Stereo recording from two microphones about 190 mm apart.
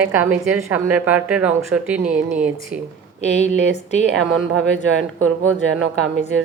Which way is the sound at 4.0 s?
70° right (ahead or behind).